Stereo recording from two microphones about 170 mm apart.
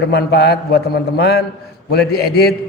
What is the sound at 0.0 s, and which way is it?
A man's voice, 75° left (ahead or behind).